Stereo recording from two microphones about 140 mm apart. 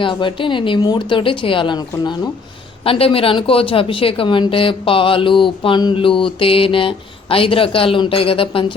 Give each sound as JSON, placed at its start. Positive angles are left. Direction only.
{"t": 0.0, "sound": "speech", "side_deg": 35}